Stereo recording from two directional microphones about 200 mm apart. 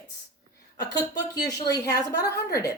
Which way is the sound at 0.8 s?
20° left (ahead or behind).